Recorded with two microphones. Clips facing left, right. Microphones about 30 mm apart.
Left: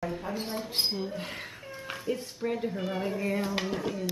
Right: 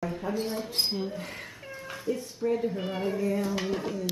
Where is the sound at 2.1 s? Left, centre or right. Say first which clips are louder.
Right 1 dB; left.